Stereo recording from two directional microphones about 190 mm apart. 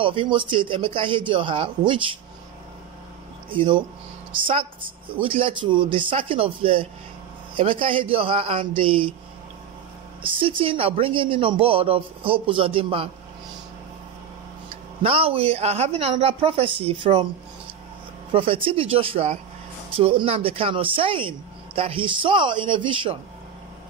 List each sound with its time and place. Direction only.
0.0 s speech: 25° right (ahead or behind)
3.4 s speech: 25° right (ahead or behind)
10.2 s speech: 25° right (ahead or behind)
15.0 s speech: 30° right (ahead or behind)
18.3 s speech: 30° right (ahead or behind)